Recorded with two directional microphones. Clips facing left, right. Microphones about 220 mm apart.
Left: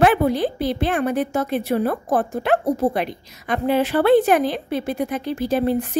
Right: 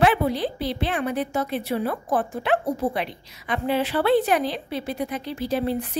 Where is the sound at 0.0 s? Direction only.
50° left (ahead or behind).